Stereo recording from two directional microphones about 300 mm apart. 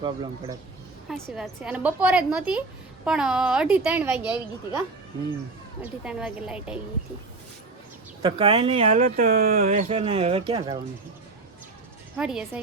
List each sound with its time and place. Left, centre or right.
0.0 s a man's voice: centre
1.0 s a woman's voice: centre
5.8 s a woman's voice: centre
8.2 s speech: centre
12.1 s a woman's voice: centre